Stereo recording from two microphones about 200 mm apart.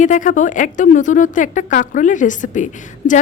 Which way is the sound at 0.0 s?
40° left (ahead or behind).